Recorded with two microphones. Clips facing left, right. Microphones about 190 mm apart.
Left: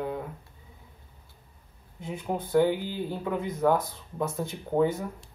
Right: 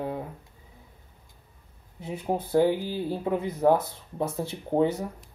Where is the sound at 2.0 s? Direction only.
35° right (ahead or behind).